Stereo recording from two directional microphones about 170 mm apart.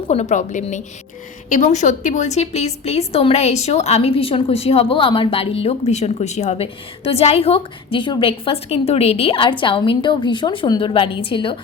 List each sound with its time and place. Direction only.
0.1 s a woman's voice: 40° left (ahead or behind)